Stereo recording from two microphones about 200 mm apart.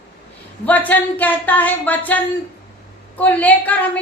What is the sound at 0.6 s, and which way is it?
Speech, 10° left (ahead or behind).